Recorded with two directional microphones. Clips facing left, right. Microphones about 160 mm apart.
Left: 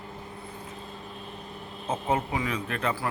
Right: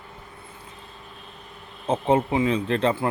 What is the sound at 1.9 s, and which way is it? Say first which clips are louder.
Speech: right 7 dB; 30° right (ahead or behind).